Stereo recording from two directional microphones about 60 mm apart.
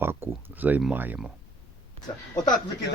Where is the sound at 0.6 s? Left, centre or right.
Right.